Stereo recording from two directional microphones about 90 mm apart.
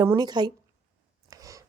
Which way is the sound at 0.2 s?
50° right (ahead or behind).